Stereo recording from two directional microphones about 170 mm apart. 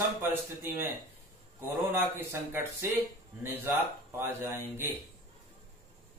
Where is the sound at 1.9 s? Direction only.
10° right (ahead or behind).